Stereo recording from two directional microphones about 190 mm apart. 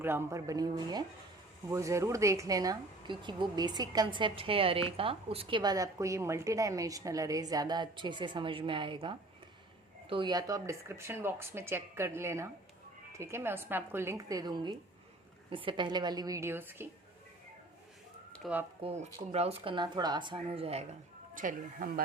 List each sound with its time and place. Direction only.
0.0 s speech: 15° right (ahead or behind)
18.4 s speech: centre (ahead or behind)
18.8 s speech: 35° right (ahead or behind)
21.3 s speech: 45° right (ahead or behind)